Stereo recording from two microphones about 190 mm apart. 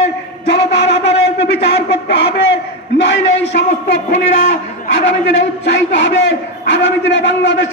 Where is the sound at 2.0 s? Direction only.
65° left (ahead or behind).